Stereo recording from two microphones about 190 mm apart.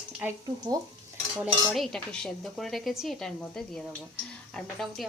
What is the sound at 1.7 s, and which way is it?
Speech, centre (ahead or behind).